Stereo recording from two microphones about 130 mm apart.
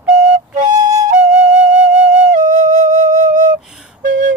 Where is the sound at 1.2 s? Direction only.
65° right (ahead or behind).